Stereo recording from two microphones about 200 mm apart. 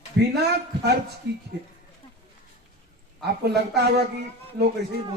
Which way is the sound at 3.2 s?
55° right (ahead or behind).